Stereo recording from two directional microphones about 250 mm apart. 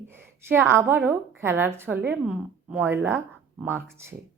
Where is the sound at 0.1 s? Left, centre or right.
Centre.